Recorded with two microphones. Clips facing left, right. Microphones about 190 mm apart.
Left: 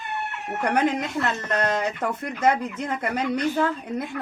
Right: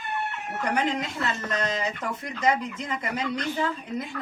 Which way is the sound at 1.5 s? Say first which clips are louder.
Left 4 dB; 60° left (ahead or behind).